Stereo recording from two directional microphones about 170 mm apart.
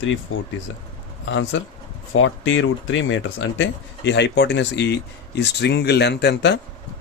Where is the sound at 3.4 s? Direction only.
90° left.